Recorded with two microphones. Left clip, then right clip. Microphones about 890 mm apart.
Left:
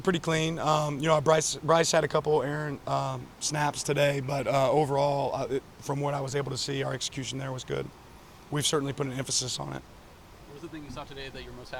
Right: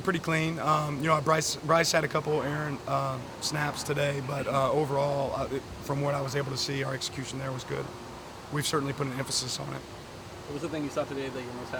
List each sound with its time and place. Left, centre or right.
0.0 s a man's voice: left